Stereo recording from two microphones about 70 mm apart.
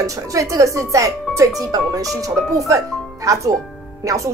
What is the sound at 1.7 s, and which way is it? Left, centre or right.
A woman's voice, right.